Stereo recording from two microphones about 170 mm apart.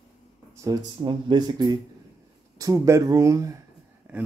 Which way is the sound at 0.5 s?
25° right (ahead or behind).